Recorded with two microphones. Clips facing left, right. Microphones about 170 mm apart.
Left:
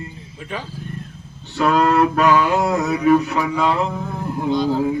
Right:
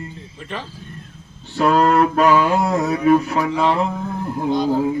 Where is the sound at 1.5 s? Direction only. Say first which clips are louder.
Right 1 dB; 30° right (ahead or behind).